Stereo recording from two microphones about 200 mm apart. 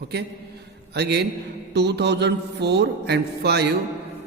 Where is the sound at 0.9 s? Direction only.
55° right (ahead or behind).